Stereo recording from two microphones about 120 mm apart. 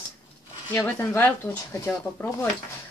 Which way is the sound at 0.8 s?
15° left (ahead or behind).